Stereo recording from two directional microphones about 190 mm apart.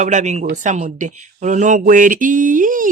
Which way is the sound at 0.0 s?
40° right (ahead or behind).